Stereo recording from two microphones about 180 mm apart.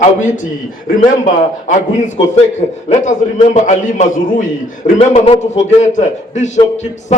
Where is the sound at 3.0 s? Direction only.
45° left (ahead or behind).